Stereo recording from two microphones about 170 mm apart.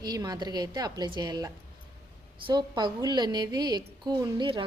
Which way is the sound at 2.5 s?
25° right (ahead or behind).